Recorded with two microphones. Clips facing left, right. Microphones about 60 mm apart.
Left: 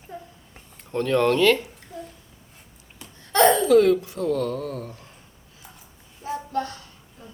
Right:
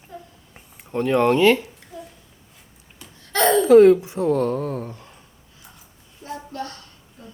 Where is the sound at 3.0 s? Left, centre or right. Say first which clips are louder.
Left 3 dB; centre.